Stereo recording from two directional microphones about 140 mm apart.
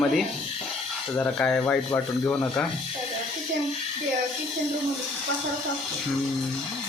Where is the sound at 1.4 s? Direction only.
10° left (ahead or behind).